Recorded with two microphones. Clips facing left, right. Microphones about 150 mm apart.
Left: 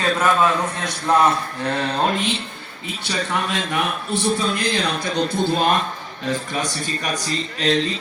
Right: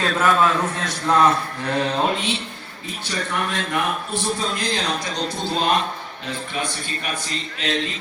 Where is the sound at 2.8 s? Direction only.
85° left; by 5.5 s 55° left (ahead or behind).